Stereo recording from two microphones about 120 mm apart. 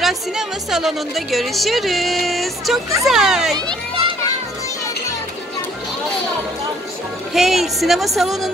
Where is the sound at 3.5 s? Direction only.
35° right (ahead or behind).